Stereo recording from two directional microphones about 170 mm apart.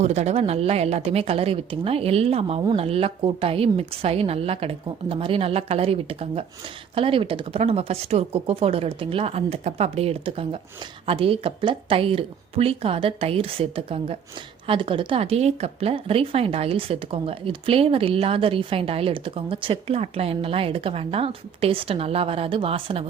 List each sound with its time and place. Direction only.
0.0 s a woman's voice: 40° right (ahead or behind)